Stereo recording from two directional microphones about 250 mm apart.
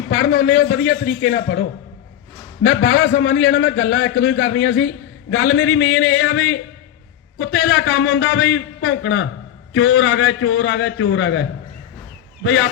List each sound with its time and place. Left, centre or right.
0.1 s a man's voice: left
2.6 s a man's voice: left